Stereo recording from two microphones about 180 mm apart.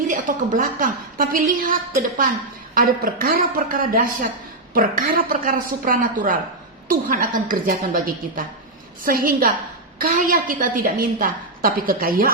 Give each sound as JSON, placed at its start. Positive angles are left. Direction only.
{"t": 0.1, "sound": "a woman's voice", "side_deg": -50}